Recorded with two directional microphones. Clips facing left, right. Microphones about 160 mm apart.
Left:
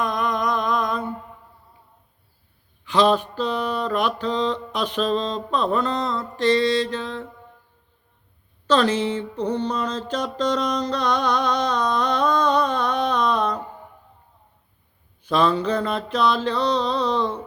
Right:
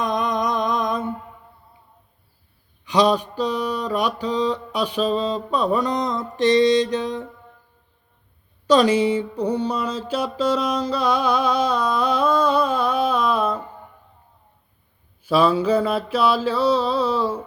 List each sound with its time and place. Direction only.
0.0 s mantra: 20° right (ahead or behind)
2.8 s a sound: 15° right (ahead or behind)
8.6 s music: 10° right (ahead or behind)
15.2 s mantra: 5° right (ahead or behind)